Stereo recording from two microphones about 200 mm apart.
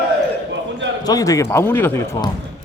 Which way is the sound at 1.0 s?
15° left (ahead or behind).